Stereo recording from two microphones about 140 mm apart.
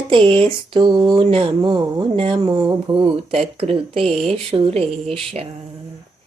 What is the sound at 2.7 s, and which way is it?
Speech, 35° right (ahead or behind).